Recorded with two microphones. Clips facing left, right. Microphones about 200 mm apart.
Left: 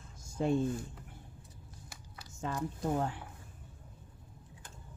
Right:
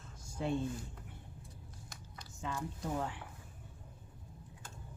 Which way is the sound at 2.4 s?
40° left (ahead or behind).